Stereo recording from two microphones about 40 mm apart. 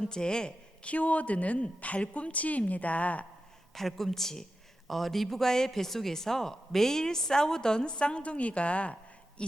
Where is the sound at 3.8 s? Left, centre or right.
Centre; by 9.0 s left.